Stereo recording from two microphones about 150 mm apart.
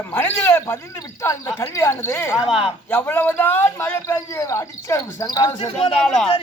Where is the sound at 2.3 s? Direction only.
5° right (ahead or behind).